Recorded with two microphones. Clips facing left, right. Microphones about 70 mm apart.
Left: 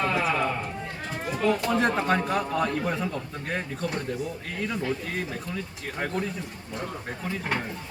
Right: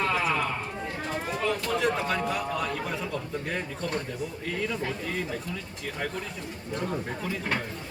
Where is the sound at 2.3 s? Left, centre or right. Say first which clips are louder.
Left 4 dB; centre.